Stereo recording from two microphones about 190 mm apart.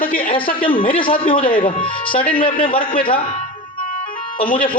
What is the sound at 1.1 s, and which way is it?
Speech, 50° left (ahead or behind).